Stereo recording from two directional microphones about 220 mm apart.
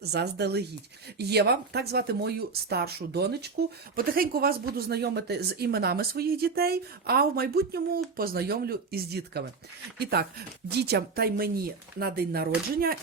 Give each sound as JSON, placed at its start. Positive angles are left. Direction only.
{"t": 0.0, "sound": "speech", "side_deg": -50}